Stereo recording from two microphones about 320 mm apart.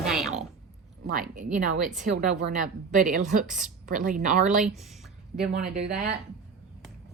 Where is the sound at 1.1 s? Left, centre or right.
Right.